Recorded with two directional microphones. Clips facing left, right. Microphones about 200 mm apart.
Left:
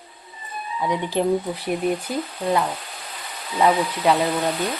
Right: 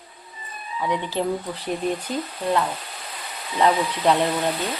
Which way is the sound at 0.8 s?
15° left (ahead or behind).